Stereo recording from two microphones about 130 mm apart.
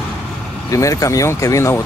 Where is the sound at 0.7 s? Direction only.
25° left (ahead or behind).